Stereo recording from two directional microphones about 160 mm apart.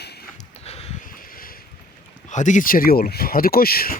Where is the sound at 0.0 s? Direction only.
90° left.